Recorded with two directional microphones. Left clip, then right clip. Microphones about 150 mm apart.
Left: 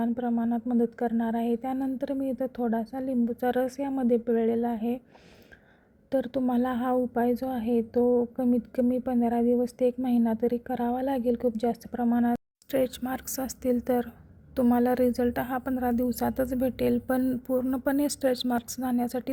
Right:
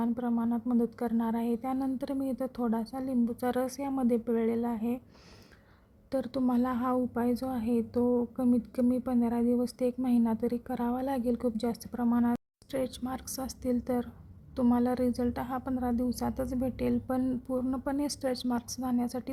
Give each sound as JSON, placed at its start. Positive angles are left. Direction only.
{"t": 0.0, "sound": "speech", "side_deg": 0}
{"t": 6.1, "sound": "speech", "side_deg": 5}
{"t": 8.0, "sound": "a woman's voice", "side_deg": -5}